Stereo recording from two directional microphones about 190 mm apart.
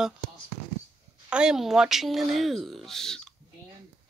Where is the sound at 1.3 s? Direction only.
5° right (ahead or behind).